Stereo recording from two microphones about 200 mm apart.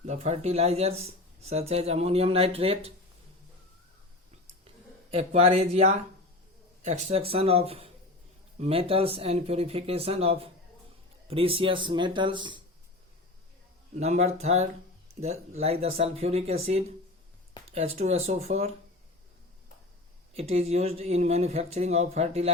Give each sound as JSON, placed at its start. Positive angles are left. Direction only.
{"t": 0.0, "sound": "speech", "side_deg": -35}
{"t": 5.1, "sound": "speech", "side_deg": -30}
{"t": 13.9, "sound": "speech", "side_deg": -35}
{"t": 20.3, "sound": "speech", "side_deg": -30}